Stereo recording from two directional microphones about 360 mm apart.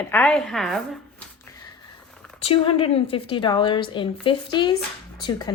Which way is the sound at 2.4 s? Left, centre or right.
Centre.